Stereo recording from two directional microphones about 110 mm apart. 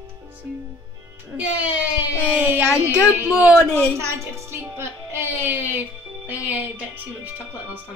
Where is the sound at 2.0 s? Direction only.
10° right (ahead or behind).